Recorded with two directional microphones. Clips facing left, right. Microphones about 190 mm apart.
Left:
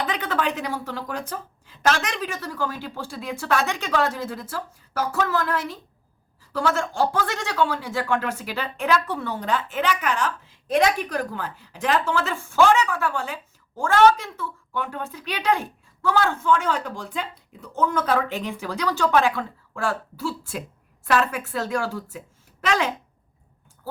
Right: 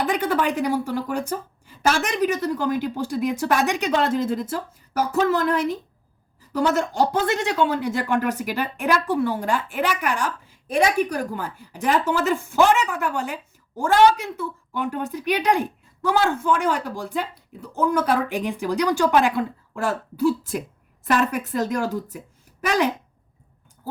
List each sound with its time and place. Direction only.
0.2 s speech: 10° right (ahead or behind)